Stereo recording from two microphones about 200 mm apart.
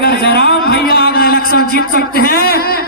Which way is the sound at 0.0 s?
55° left (ahead or behind).